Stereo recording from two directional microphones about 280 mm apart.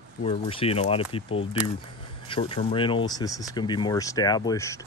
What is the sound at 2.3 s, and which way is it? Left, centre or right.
Speech, centre.